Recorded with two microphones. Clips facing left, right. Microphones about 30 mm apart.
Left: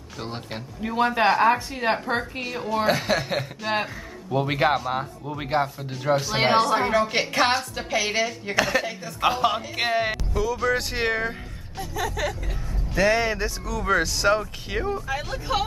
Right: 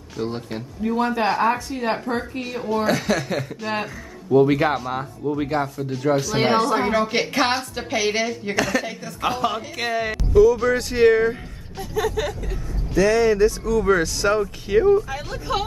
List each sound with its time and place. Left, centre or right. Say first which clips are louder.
0.2 s speech: right 6 dB; centre
1.2 s speech: left 4 dB; centre
2.4 s speech: right 2 dB; centre
3.0 s a woman's voice: right 1 dB; centre
8.5 s speech: left 1 dB; centre
9.8 s speech: even; left
10.1 s speech: right 11 dB; centre
11.8 s a woman's voice: right 4 dB; centre
12.9 s speech: right 4 dB; left
13.7 s a woman's voice: right 5 dB; centre